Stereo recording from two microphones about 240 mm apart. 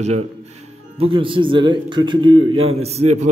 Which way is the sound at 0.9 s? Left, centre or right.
Right.